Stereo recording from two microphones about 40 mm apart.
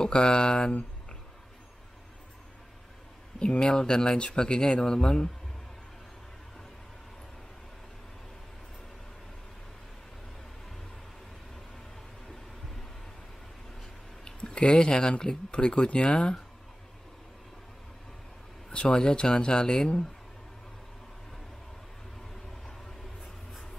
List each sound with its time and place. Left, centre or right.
0.0 s speech: left
3.3 s speech: left
14.2 s speech: left
18.9 s speech: centre